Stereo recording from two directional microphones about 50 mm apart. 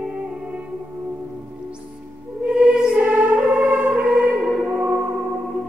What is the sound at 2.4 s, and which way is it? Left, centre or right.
Music, centre.